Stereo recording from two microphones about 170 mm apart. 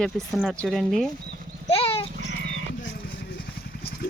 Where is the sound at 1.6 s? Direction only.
35° left (ahead or behind).